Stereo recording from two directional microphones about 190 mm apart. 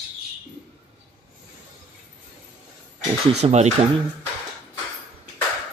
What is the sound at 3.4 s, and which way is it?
Speech, 35° right (ahead or behind).